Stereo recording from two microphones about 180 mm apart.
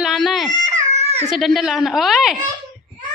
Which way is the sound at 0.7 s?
40° right (ahead or behind).